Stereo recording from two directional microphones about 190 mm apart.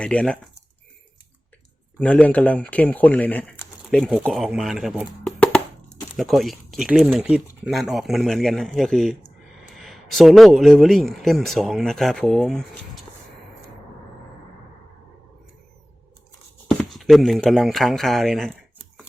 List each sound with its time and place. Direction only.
0.0 s speech: 5° left (ahead or behind)
2.0 s speech: 5° left (ahead or behind)
16.9 s speech: centre (ahead or behind)